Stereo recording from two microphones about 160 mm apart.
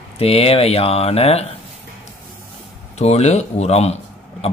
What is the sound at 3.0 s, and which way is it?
A man's voice, 45° left (ahead or behind).